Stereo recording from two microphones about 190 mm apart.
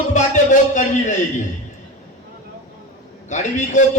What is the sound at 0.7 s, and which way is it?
Speech, 40° left (ahead or behind).